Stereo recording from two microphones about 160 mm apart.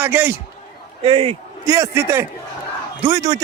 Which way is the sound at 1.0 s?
35° right (ahead or behind).